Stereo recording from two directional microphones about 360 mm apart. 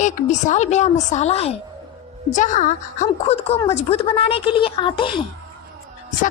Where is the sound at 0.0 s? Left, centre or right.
Centre.